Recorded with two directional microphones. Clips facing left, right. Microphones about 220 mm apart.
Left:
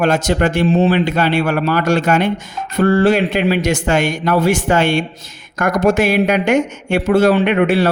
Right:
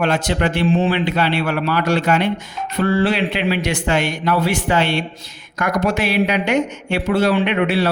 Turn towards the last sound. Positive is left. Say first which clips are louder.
# left 4 dB
turn(degrees=50)  # may be behind; listen again after turning